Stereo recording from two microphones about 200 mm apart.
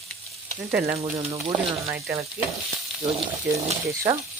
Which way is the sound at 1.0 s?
25° right (ahead or behind).